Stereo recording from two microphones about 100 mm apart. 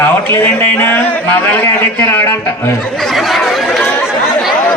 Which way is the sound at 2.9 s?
Centre (ahead or behind).